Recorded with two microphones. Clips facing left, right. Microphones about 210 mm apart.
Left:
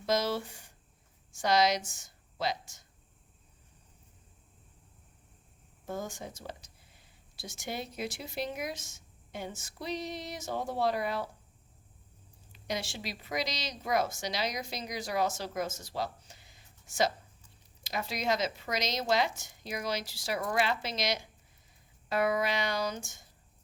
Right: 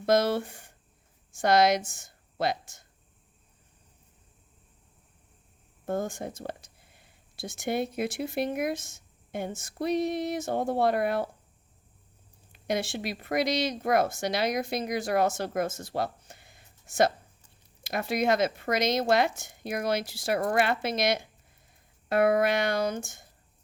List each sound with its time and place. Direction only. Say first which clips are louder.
0.0 s speech: right 6 dB; 55° right (ahead or behind)
5.8 s speech: right 7 dB; 55° right (ahead or behind)
12.5 s speech: right 7 dB; 55° right (ahead or behind)